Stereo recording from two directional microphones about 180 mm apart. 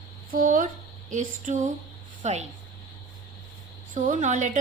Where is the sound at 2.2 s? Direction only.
40° right (ahead or behind).